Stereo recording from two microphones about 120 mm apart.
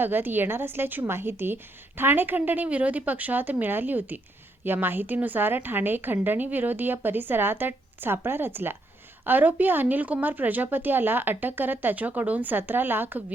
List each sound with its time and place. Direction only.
0.0 s a woman's voice: 15° right (ahead or behind)